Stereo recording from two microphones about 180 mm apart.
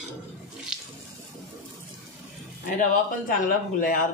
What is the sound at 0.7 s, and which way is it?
Sink, 5° right (ahead or behind).